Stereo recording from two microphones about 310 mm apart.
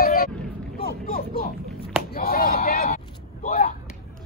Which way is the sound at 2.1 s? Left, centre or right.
Left.